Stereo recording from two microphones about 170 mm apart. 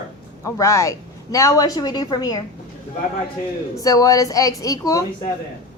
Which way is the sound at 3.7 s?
20° left (ahead or behind).